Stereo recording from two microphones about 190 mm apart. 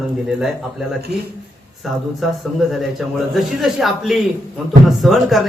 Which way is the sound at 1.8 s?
Centre (ahead or behind).